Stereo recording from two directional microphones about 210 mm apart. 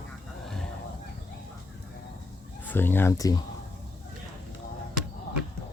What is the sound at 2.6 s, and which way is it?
Speech, 10° left (ahead or behind).